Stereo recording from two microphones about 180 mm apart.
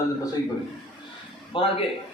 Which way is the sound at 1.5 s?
30° left (ahead or behind).